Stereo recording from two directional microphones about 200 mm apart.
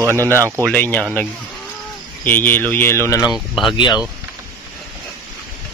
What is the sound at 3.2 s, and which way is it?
Speech, centre (ahead or behind).